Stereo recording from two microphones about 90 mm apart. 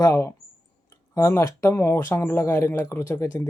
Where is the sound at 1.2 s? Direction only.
30° left (ahead or behind).